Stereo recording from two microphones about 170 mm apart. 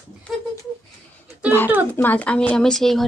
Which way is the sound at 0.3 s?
Centre (ahead or behind).